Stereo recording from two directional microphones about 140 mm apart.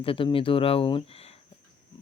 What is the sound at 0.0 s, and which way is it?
Speech, 40° left (ahead or behind).